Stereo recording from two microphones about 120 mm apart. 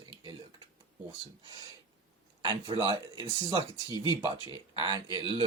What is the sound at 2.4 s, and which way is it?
Speech, 40° right (ahead or behind).